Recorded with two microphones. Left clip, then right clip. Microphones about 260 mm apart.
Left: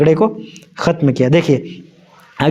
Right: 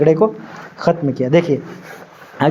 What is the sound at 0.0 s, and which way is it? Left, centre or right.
A man's voice, left.